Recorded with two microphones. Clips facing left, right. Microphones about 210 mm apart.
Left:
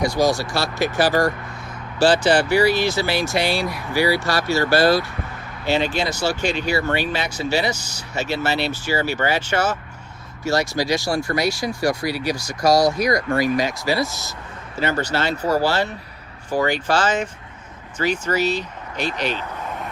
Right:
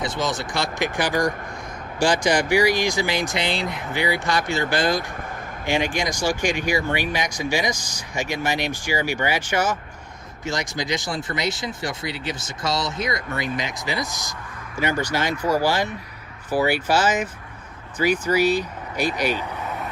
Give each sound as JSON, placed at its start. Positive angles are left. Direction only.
{"t": 0.0, "sound": "speech", "side_deg": -20}